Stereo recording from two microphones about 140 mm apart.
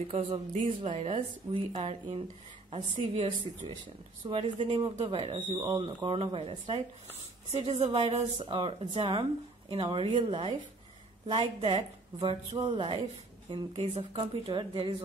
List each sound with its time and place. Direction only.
0.1 s a woman's voice: 50° right (ahead or behind)
7.9 s a woman's voice: 50° right (ahead or behind)
8.5 s a woman's voice: 35° right (ahead or behind)
12.7 s speech: 35° right (ahead or behind)
14.1 s a woman's voice: 45° right (ahead or behind)